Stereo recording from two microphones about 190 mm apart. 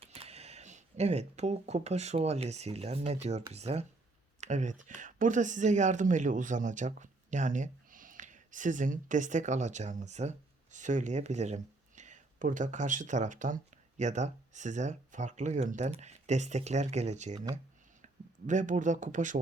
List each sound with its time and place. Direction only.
0.0 s speech: 30° right (ahead or behind)